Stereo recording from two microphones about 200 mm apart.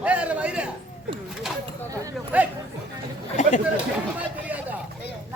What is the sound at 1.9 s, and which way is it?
Speech, 10° right (ahead or behind).